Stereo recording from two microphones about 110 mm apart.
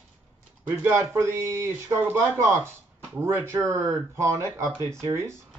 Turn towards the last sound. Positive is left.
turn(degrees=-25)  # may be behind; listen again after turning